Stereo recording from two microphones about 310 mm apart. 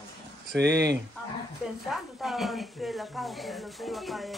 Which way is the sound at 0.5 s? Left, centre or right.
Right.